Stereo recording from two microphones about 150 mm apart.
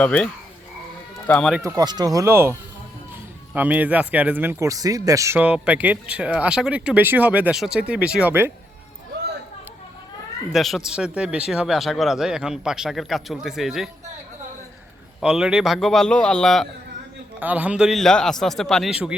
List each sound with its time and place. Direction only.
0.0 s speech: 10° left (ahead or behind)
1.3 s speech: 5° left (ahead or behind)
1.6 s speech: 25° right (ahead or behind)
10.5 s speech: centre (ahead or behind)
15.2 s speech: 5° right (ahead or behind)
17.4 s speech: 10° right (ahead or behind)